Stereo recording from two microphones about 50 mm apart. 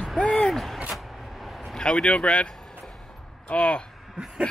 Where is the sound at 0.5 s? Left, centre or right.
Centre.